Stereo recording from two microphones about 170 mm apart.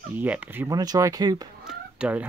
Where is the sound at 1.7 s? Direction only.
5° right (ahead or behind).